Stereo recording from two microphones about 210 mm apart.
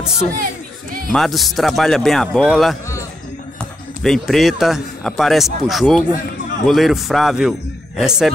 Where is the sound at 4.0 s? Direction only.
Centre (ahead or behind).